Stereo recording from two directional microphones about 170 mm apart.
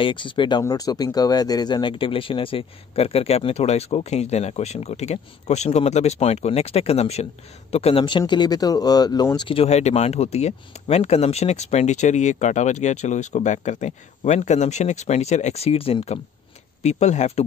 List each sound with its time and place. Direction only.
0.0 s speech: 30° left (ahead or behind)
9.5 s speech: 35° left (ahead or behind)